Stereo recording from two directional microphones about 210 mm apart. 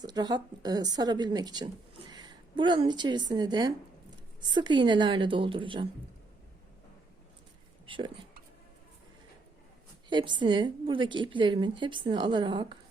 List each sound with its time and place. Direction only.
0.0 s a woman's voice: 20° right (ahead or behind)
7.9 s speech: 25° right (ahead or behind)
10.1 s a woman's voice: 20° right (ahead or behind)